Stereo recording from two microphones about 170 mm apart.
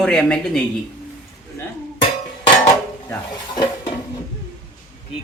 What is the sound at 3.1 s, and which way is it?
Speech, 25° left (ahead or behind).